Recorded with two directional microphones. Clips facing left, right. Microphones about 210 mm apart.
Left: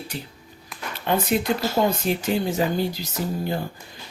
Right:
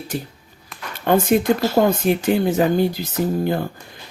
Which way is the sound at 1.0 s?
50° right (ahead or behind).